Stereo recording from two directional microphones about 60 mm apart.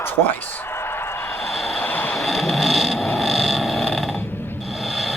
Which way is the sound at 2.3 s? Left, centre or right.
Centre.